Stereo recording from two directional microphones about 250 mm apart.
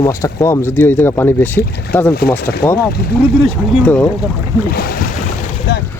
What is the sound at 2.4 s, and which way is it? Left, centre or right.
Speech, left.